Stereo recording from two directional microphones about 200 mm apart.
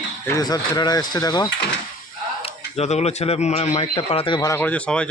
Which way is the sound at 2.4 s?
30° left (ahead or behind).